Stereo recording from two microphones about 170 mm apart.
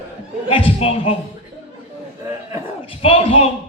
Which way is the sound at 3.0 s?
35° left (ahead or behind).